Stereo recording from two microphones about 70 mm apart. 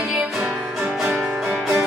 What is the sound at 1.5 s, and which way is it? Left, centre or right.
Music, right.